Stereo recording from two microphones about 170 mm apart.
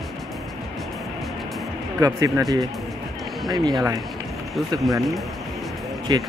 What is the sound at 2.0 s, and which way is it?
Speech, 20° right (ahead or behind).